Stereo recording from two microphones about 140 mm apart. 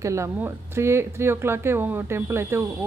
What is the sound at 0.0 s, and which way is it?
A woman's voice, 20° right (ahead or behind).